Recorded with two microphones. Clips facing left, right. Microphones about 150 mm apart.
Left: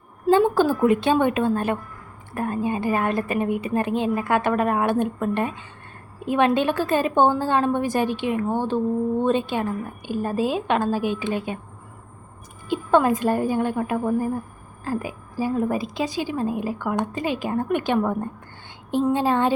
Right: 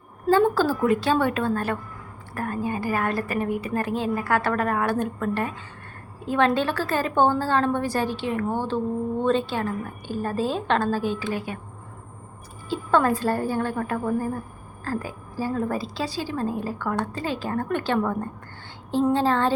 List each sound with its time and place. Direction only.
0.3 s a woman's voice: 20° left (ahead or behind)
12.6 s a woman's voice: 15° left (ahead or behind)